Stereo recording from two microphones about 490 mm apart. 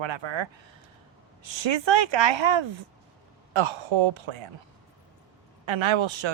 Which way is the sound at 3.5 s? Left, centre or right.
Right.